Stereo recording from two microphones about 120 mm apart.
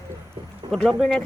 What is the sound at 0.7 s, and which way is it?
Speech, 5° left (ahead or behind).